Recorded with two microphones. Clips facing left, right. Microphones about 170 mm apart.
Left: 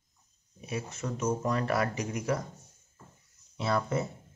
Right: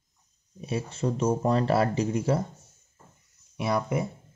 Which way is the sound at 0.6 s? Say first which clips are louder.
Right 6 dB; 30° right (ahead or behind).